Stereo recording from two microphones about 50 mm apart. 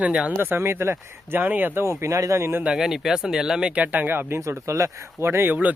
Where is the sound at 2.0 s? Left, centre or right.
Right.